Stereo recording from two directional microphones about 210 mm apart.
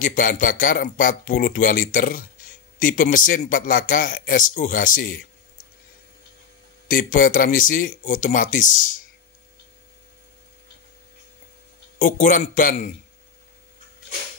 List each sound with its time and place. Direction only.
0.0 s a man's voice: 40° left (ahead or behind)
6.9 s a man's voice: 40° left (ahead or behind)
12.0 s a man's voice: 40° left (ahead or behind)